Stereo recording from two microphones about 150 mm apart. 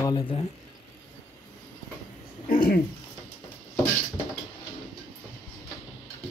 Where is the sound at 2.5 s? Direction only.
75° left (ahead or behind).